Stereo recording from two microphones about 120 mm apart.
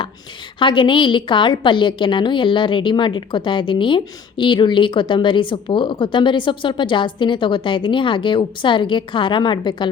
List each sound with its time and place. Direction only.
0.6 s a woman's voice: 45° left (ahead or behind)